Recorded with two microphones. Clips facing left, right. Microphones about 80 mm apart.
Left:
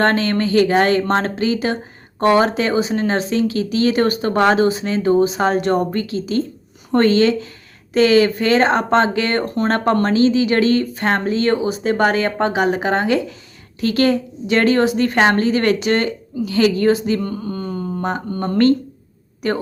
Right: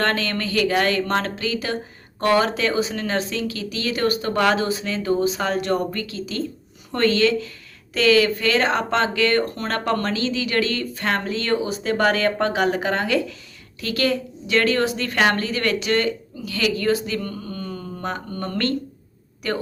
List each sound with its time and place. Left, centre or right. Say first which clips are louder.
0.0 s speech: left 6 dB; left